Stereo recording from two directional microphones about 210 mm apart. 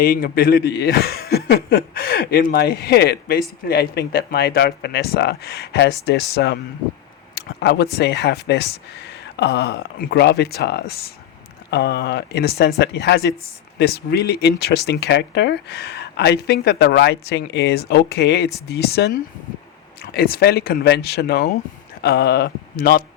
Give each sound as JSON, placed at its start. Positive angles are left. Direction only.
{"t": 0.0, "sound": "speech", "side_deg": 45}